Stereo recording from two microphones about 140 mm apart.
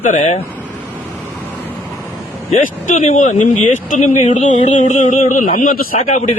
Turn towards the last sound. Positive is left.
turn(degrees=60)  # may be behind; listen again after turning